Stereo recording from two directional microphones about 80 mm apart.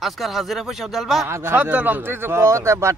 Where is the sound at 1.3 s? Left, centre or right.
Right.